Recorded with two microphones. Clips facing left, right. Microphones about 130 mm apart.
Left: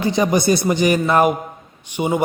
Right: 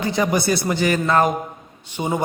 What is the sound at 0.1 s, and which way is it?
A man's voice, 20° left (ahead or behind).